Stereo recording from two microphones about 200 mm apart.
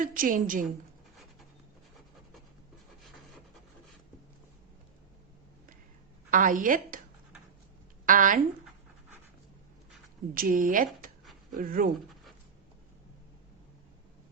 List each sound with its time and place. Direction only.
0.0 s speech: 45° right (ahead or behind)
6.3 s a woman's voice: 40° right (ahead or behind)
8.0 s speech: 40° right (ahead or behind)
10.3 s speech: 45° right (ahead or behind)